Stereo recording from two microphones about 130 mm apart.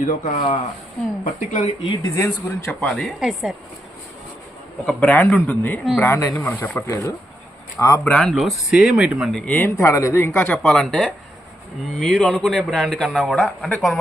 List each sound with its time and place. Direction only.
0.0 s speech: 80° left
1.2 s speech: 65° left (ahead or behind)
2.0 s speech: 25° left (ahead or behind)
2.8 s speech: 5° left (ahead or behind)
4.9 s speech: 5° left (ahead or behind)
6.1 s speech: 25° left (ahead or behind)
6.4 s speech: 15° left (ahead or behind)
8.0 s speech: 10° left (ahead or behind)
8.3 s speech: centre (ahead or behind)
9.5 s speech: 15° left (ahead or behind)